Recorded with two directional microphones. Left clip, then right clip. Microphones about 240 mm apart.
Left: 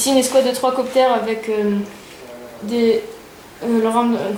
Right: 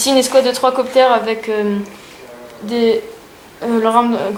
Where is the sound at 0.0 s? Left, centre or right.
Centre.